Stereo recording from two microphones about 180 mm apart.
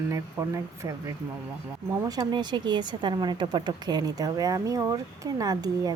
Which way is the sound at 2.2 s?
25° right (ahead or behind).